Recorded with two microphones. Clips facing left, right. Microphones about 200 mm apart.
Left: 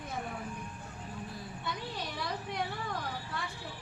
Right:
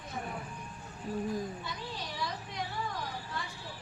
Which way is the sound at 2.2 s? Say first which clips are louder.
Even; 55° left (ahead or behind).